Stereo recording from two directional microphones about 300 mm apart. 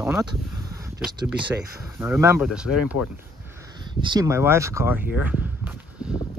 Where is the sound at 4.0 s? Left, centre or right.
Centre.